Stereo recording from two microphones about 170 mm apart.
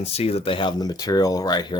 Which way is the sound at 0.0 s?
35° left (ahead or behind).